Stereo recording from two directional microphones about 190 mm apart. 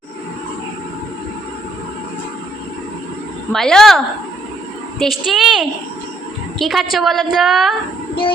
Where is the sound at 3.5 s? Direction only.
Centre (ahead or behind).